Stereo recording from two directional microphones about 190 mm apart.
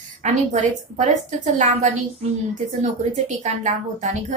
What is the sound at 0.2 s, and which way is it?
A woman's voice, 40° right (ahead or behind).